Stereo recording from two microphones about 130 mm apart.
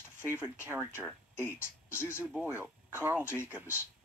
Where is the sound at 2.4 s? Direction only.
15° right (ahead or behind).